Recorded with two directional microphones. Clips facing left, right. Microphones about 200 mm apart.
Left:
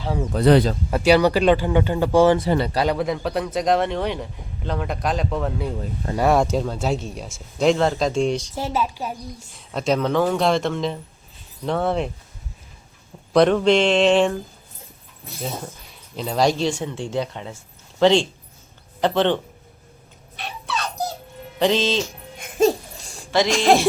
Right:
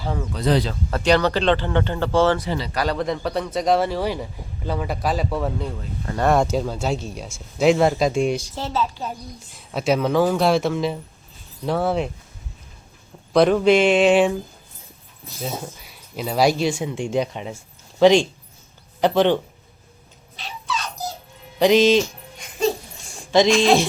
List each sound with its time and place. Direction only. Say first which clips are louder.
0.3 s speech: left 6 dB; 55° left (ahead or behind)
0.9 s speech: left 1 dB; 10° left (ahead or behind)
2.5 s speech: left 6 dB; 50° left (ahead or behind)
2.7 s speech: left 2 dB; 15° left (ahead or behind)
3.0 s speech: left 1 dB; centre (ahead or behind)
8.5 s speech: left 1 dB; 10° left (ahead or behind)
9.7 s speech: right 1 dB; 5° right (ahead or behind)
13.3 s speech: even; 5° right (ahead or behind)
15.4 s speech: right 1 dB; 5° right (ahead or behind)
20.3 s a sound: even; 60° left (ahead or behind)
21.6 s speech: right 5 dB; 10° right (ahead or behind)
22.4 s music: left 4 dB; 45° left (ahead or behind)